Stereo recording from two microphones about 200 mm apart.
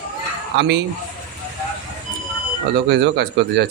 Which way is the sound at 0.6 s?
60° right (ahead or behind).